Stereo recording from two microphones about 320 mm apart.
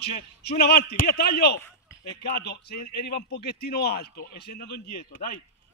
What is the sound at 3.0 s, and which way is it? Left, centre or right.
A man's voice, left.